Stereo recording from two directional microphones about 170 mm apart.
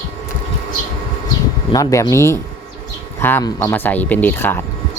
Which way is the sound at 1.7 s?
20° left (ahead or behind).